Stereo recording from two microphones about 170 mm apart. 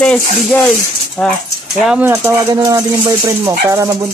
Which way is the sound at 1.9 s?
10° right (ahead or behind).